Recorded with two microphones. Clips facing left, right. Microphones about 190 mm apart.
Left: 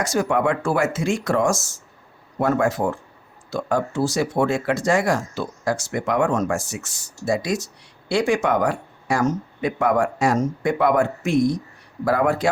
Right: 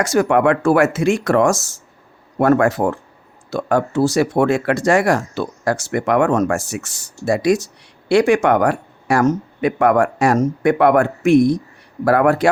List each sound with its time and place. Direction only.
0.0 s speech: 70° right (ahead or behind)